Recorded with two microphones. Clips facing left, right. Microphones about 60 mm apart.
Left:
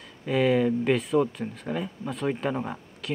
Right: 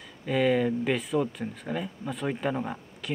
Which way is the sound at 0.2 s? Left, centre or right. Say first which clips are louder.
Left 2 dB; centre.